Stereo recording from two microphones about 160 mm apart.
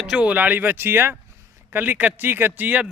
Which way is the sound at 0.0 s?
5° right (ahead or behind).